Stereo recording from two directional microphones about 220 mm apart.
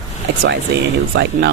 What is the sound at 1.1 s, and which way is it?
Speech, 50° right (ahead or behind).